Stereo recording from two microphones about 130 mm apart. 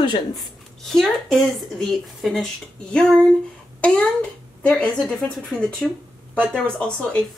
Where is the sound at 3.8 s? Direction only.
10° left (ahead or behind).